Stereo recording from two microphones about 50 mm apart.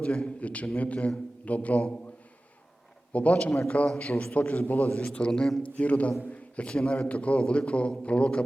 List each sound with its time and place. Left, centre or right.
0.0 s a man's voice: left
3.1 s a man's voice: left
5.6 s a man's voice: left